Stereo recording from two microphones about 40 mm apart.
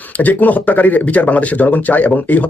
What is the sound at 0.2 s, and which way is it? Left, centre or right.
Speech, left.